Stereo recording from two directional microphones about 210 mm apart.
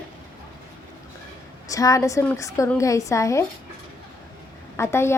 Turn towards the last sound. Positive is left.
turn(degrees=10)  # may be behind; listen again after turning